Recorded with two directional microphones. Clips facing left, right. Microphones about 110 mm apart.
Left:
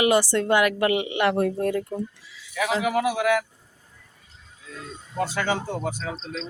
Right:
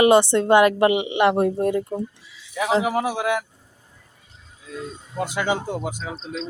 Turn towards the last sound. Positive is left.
turn(degrees=-5)  # may be behind; listen again after turning